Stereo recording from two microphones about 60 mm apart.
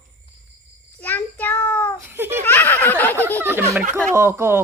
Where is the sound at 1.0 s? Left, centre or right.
Left.